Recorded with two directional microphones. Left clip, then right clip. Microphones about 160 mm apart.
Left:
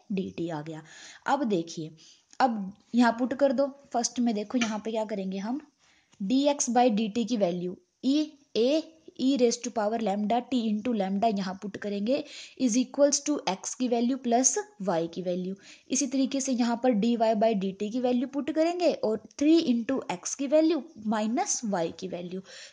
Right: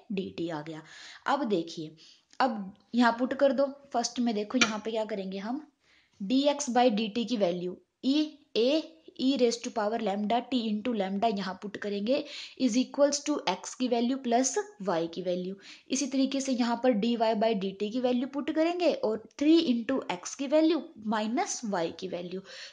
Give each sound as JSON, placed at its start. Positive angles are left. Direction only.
{"t": 0.1, "sound": "a woman's voice", "side_deg": 30}